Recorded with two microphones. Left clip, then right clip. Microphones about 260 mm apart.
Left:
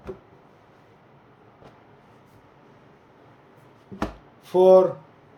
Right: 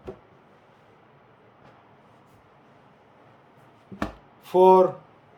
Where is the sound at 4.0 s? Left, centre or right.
Centre.